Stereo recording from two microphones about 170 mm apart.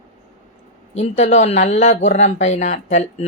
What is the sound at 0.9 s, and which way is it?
Speech, 40° left (ahead or behind).